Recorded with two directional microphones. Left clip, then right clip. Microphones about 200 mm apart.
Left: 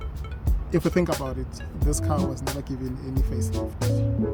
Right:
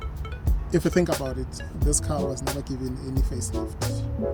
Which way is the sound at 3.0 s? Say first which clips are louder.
Left 1 dB; 5° left (ahead or behind).